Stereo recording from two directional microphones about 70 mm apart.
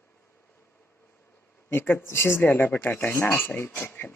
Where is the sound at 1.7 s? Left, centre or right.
Left.